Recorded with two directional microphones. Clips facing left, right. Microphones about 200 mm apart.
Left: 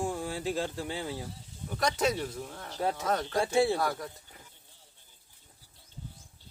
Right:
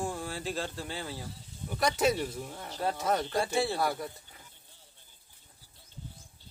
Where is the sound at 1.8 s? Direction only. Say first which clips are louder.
Right 1 dB; 5° right (ahead or behind).